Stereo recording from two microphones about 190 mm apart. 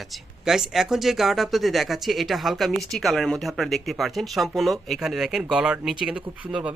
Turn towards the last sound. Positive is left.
turn(degrees=-5)  # may be behind; listen again after turning